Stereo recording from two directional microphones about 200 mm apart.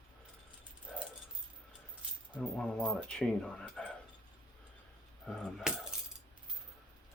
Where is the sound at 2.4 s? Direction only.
5° left (ahead or behind).